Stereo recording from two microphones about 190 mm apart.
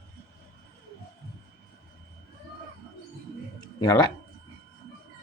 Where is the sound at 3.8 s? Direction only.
20° left (ahead or behind).